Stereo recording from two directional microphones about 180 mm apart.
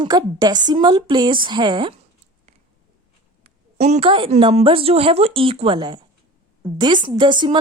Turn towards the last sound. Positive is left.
turn(degrees=-25)  # may be behind; listen again after turning